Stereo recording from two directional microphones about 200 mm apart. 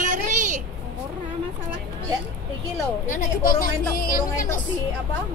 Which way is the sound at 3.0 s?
40° left (ahead or behind).